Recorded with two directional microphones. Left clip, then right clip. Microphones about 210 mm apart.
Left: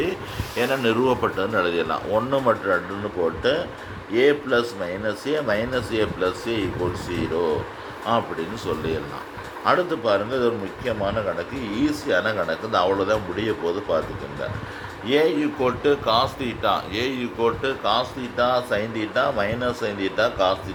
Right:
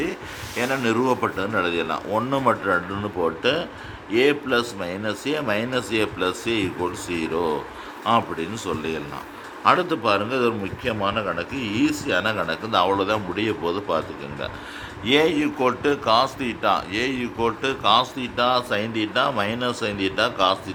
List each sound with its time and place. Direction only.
0.5 s a man's voice: 5° right (ahead or behind)
15.0 s speech: 20° right (ahead or behind)